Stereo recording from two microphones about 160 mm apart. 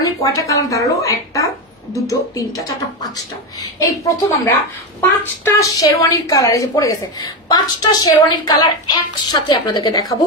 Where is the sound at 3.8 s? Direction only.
20° left (ahead or behind).